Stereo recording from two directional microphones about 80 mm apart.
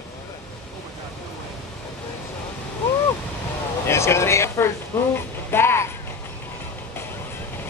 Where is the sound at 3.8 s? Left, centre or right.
Left.